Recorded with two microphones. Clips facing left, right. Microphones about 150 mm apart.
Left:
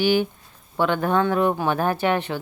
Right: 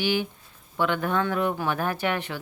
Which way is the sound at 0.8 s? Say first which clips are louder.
Left 4 dB; 35° left (ahead or behind).